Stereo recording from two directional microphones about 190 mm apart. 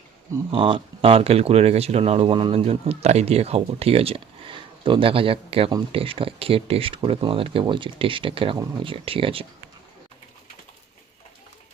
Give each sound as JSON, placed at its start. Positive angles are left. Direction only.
{"t": 0.5, "sound": "speech", "side_deg": -25}